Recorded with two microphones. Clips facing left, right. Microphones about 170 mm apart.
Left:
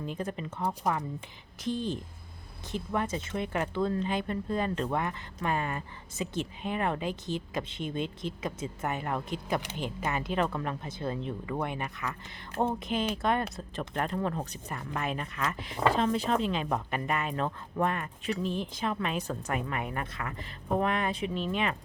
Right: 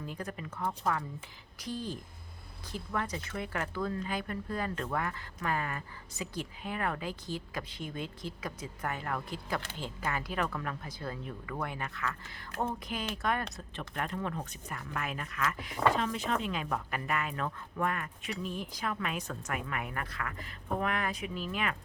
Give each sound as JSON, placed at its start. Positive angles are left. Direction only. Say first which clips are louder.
{"t": 0.0, "sound": "speech", "louder": "left 5 dB", "side_deg": 25}